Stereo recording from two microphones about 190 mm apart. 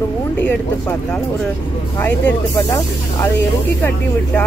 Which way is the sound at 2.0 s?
10° left (ahead or behind).